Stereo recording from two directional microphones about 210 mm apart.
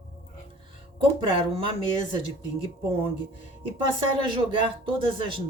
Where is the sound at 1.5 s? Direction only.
25° right (ahead or behind).